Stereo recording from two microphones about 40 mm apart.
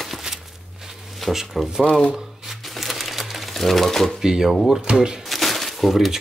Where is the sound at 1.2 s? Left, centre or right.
Centre.